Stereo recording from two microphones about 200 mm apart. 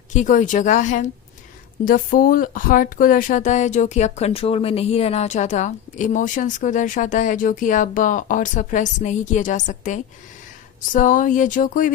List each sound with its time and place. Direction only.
0.1 s speech: 40° left (ahead or behind)